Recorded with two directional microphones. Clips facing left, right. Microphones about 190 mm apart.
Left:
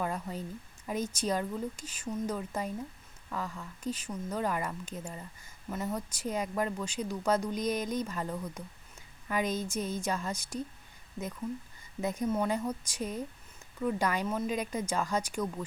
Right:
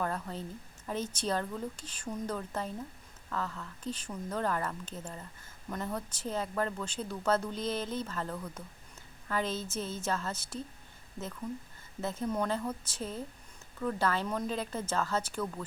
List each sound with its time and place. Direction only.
0.0 s speech: 10° left (ahead or behind)
11.9 s speech: 15° left (ahead or behind)